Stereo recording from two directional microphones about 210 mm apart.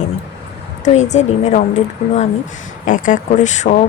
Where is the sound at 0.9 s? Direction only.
35° left (ahead or behind).